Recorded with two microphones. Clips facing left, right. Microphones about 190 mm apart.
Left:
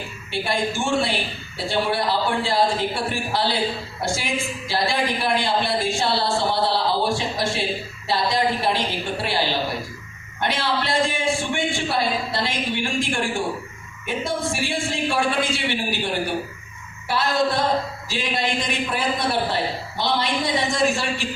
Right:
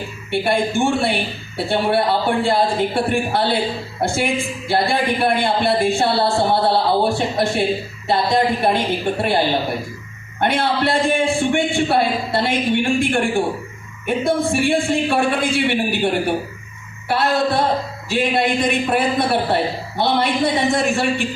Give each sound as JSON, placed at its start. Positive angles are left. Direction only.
{"t": 0.3, "sound": "a man's voice", "side_deg": -55}
{"t": 10.4, "sound": "a man's voice", "side_deg": -55}